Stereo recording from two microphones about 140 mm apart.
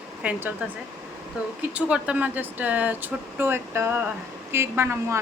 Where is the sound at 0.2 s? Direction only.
10° right (ahead or behind).